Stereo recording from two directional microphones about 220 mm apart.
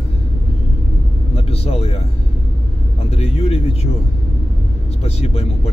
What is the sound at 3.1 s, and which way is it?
Speech, 25° left (ahead or behind).